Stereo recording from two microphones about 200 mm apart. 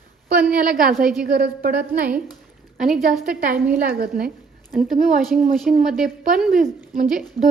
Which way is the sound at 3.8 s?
45° right (ahead or behind).